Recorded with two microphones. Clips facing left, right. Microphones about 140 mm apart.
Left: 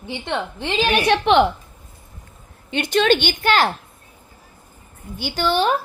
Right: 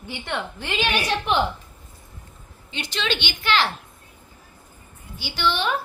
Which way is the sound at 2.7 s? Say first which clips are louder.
Left 11 dB; 55° left (ahead or behind).